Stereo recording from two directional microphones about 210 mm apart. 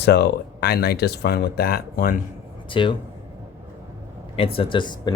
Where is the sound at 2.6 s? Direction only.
25° left (ahead or behind).